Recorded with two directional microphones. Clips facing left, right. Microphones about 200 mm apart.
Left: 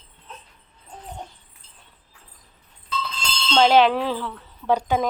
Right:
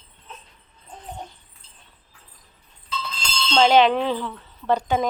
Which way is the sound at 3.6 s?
5° left (ahead or behind).